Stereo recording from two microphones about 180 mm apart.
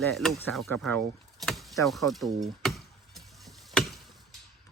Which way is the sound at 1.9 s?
Centre (ahead or behind).